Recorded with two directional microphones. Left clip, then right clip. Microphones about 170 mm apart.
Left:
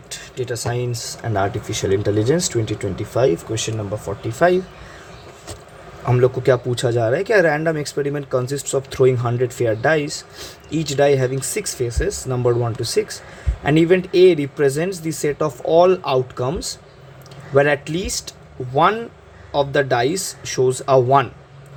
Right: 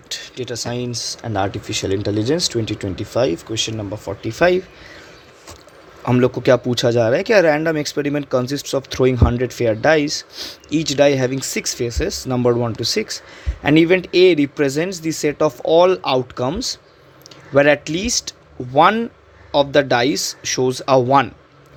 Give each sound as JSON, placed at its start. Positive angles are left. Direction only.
{"t": 0.1, "sound": "speech", "side_deg": -30}
{"t": 4.0, "sound": "speech", "side_deg": -45}
{"t": 6.1, "sound": "speech", "side_deg": -50}